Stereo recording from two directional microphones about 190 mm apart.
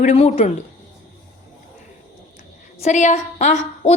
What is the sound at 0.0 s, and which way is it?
Speech, 40° left (ahead or behind).